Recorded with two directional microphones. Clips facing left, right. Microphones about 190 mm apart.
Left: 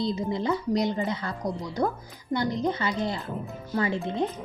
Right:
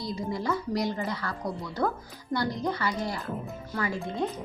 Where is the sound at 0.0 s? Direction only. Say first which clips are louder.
Left 4 dB; 25° left (ahead or behind).